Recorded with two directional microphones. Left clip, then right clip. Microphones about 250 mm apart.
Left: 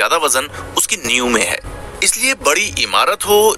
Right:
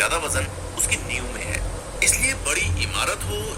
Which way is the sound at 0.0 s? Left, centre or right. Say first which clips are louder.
Left 8 dB; left.